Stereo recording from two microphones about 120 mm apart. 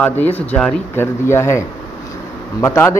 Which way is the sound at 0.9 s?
20° left (ahead or behind).